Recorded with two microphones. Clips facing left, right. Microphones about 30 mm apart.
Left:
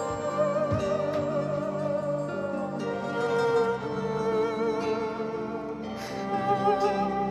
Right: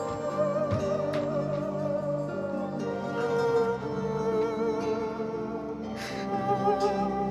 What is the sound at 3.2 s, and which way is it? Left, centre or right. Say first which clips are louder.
Music: left 1 dB; centre.